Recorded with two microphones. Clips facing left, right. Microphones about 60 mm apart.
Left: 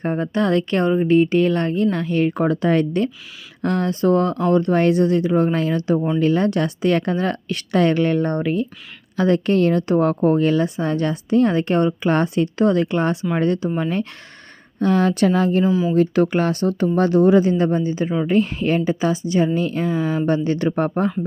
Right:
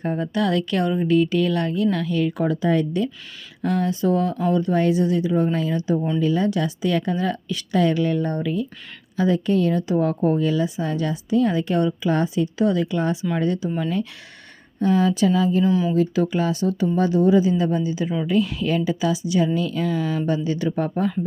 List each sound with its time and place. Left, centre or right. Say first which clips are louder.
0.0 s speech: left 2 dB; left
15.6 s speech: left 1 dB; centre
16.0 s speech: left 4 dB; left
17.6 s speech: left 3 dB; left
20.2 s speech: left 4 dB; left